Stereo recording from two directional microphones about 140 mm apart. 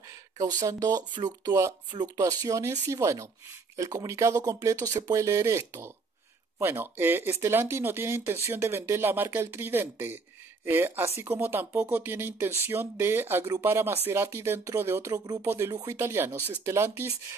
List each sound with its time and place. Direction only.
0.7 s speech: 25° right (ahead or behind)